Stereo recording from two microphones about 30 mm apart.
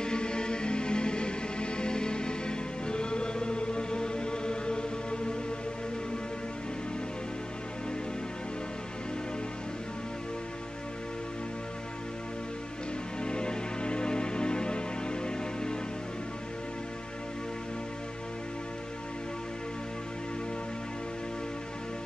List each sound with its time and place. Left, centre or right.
0.0 s music: left
13.2 s music: left